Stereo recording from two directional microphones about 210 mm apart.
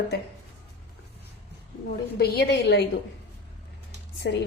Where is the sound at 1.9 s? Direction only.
50° left (ahead or behind).